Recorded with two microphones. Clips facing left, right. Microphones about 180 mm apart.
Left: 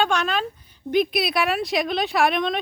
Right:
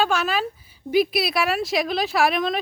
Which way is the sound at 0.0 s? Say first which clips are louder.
Even; 5° right (ahead or behind).